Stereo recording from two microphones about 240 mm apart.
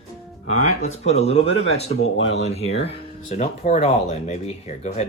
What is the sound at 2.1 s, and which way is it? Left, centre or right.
Speech, left.